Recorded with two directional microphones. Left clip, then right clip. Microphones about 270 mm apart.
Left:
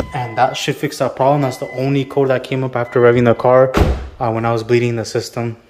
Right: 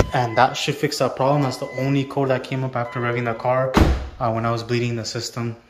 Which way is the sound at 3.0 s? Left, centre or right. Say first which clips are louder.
Left 15 dB; left.